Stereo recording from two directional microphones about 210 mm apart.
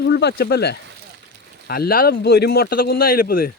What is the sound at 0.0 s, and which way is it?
Speech, 55° left (ahead or behind).